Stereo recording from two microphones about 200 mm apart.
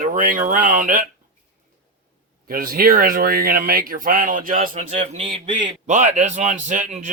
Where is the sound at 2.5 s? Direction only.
45° right (ahead or behind).